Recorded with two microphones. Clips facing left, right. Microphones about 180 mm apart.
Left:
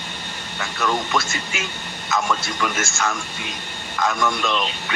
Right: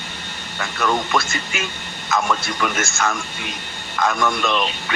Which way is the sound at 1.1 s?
55° right (ahead or behind).